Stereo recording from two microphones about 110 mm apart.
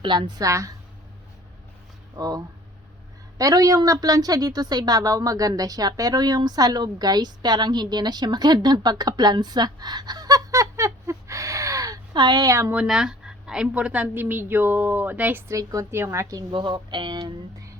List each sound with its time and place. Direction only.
0.0 s a woman's voice: 45° right (ahead or behind)
2.1 s a woman's voice: 35° right (ahead or behind)
12.7 s a woman's voice: 10° right (ahead or behind)
15.5 s a woman's voice: 30° right (ahead or behind)
16.5 s speech: 50° right (ahead or behind); by 17.7 s 30° right (ahead or behind)